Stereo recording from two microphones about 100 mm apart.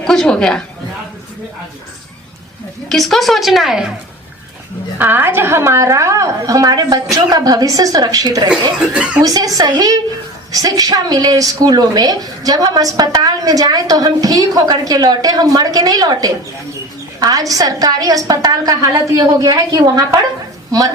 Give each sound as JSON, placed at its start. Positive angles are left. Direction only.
{"t": 0.0, "sound": "a woman's voice", "side_deg": 5}
{"t": 2.9, "sound": "speech", "side_deg": 0}
{"t": 4.9, "sound": "a woman's voice", "side_deg": -20}
{"t": 8.4, "sound": "speech", "side_deg": -10}
{"t": 9.2, "sound": "a woman's voice", "side_deg": -40}